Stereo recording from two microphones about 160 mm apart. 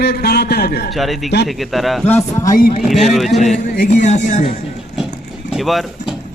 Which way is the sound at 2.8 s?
Centre (ahead or behind).